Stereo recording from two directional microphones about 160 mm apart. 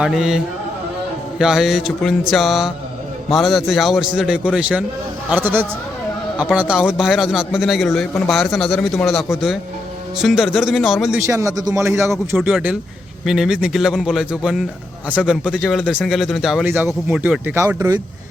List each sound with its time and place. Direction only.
0.0 s a man's voice: 5° right (ahead or behind)
11.3 s speech: 20° right (ahead or behind)
12.4 s a man's voice: 5° right (ahead or behind)
16.6 s speech: 15° right (ahead or behind)